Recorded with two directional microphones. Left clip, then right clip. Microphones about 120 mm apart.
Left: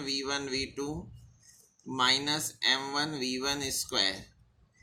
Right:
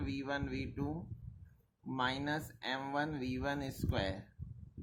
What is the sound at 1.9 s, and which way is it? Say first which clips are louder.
Speech: left 9 dB; 40° right (ahead or behind).